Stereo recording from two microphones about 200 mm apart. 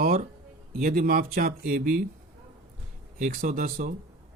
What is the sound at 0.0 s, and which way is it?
Speech, 40° right (ahead or behind).